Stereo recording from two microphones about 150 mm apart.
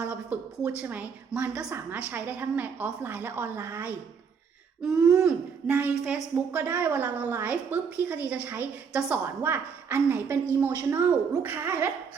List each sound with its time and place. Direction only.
0.0 s a woman's voice: 15° right (ahead or behind)
4.8 s a woman's voice: 5° right (ahead or behind)